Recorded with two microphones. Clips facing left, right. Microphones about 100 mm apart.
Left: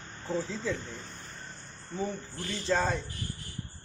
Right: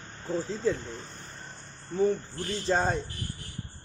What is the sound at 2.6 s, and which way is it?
Speech, 40° right (ahead or behind).